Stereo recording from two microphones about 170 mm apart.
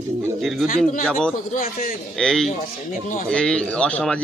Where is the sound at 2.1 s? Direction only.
5° left (ahead or behind).